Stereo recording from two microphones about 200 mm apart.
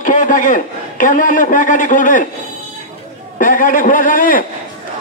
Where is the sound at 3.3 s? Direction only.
40° left (ahead or behind).